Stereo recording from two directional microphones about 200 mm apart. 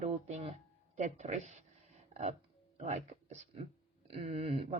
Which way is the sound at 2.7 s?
35° right (ahead or behind).